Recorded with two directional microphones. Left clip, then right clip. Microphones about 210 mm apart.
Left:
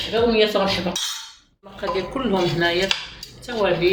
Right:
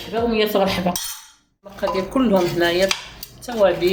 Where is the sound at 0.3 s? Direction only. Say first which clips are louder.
Even; 45° right (ahead or behind).